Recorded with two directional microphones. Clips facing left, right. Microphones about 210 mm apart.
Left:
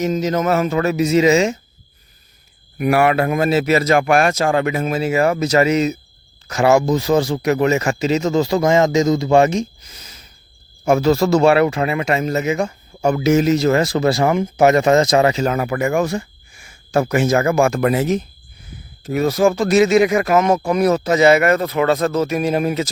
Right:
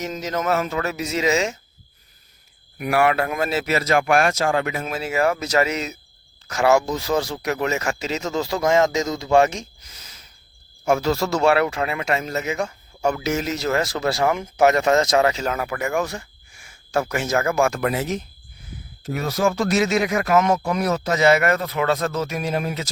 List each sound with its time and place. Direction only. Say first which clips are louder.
0.0 s speech: left 7 dB; centre (ahead or behind)
2.9 s speech: left 4 dB; 10° left (ahead or behind)
3.7 s speech: left 1 dB; 15° left (ahead or behind)
4.9 s speech: left 3 dB; centre (ahead or behind)
11.0 s speech: left 7 dB; 35° left (ahead or behind)
11.4 s speech: left 1 dB; 5° left (ahead or behind)
19.5 s speech: left 7 dB; centre (ahead or behind)
21.8 s speech: left 6 dB; 25° left (ahead or behind)
22.3 s speech: left 7 dB; 5° left (ahead or behind)